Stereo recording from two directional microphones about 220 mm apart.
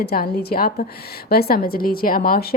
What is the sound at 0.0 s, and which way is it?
A woman's voice, 45° left (ahead or behind).